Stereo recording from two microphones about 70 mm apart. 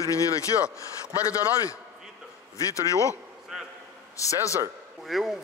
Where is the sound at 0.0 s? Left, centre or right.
Left.